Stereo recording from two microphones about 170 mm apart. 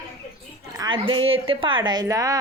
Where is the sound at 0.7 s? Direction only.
25° right (ahead or behind).